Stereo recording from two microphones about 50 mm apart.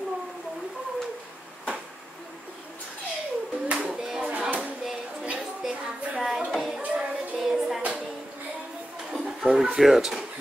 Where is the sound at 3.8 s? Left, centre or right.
Centre.